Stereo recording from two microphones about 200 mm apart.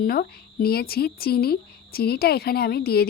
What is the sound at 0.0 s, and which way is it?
A woman's voice, 50° left (ahead or behind).